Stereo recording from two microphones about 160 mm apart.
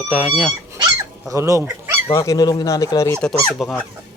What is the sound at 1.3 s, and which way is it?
Speech, 20° right (ahead or behind).